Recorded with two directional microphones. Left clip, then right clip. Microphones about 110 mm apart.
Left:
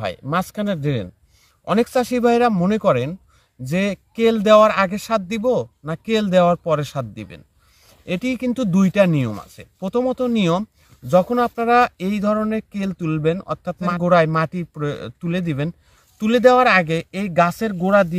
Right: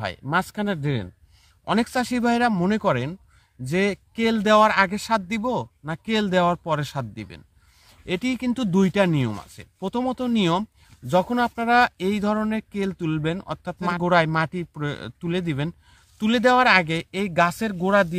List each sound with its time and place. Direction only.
0.0 s speech: 30° left (ahead or behind); by 18.1 s centre (ahead or behind)